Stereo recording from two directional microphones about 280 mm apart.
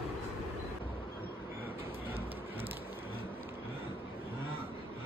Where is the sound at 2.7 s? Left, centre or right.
Centre.